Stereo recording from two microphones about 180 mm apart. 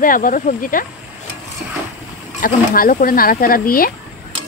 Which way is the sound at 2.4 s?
50° left (ahead or behind).